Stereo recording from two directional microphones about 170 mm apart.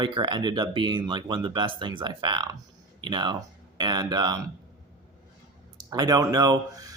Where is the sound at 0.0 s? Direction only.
30° right (ahead or behind).